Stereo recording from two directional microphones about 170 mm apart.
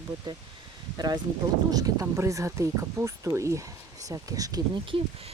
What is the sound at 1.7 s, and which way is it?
Speech, 20° right (ahead or behind).